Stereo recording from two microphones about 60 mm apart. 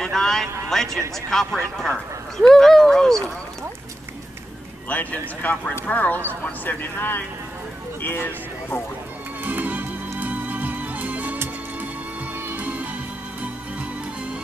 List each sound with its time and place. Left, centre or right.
0.0 s a sound: centre
1.3 s speech: centre
4.8 s speech: left
9.4 s music: right
12.5 s music: right